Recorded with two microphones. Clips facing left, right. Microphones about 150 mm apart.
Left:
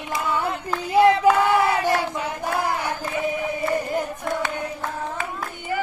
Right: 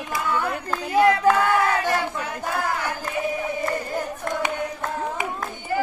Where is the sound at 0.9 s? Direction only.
20° left (ahead or behind).